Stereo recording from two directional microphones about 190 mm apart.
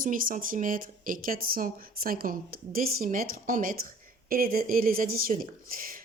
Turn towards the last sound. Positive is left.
turn(degrees=-45)  # may be behind; listen again after turning